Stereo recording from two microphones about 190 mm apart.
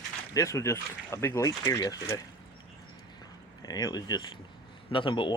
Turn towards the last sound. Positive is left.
turn(degrees=25)  # may be behind; listen again after turning